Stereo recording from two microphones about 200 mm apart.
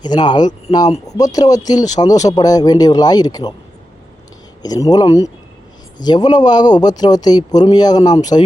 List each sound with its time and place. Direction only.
0.0 s speech: 20° left (ahead or behind)
4.6 s speech: 20° left (ahead or behind)